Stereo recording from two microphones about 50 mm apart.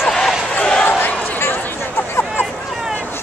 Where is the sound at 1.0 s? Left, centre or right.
Left.